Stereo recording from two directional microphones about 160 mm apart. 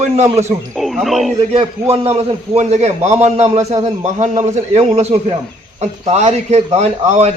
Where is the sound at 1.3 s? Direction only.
40° right (ahead or behind).